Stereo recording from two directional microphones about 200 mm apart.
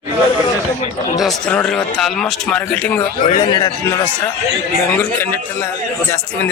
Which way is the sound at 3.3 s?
20° left (ahead or behind).